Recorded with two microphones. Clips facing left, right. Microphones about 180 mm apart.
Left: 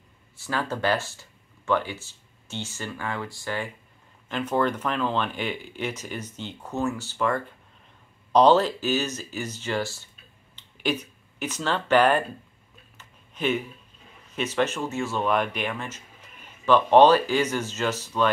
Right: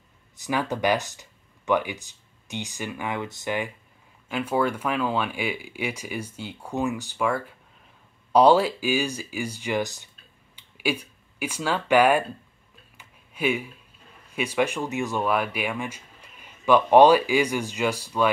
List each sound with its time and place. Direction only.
0.4 s speech: 15° right (ahead or behind)
12.9 s a sound: 10° right (ahead or behind)
14.3 s speech: 10° right (ahead or behind)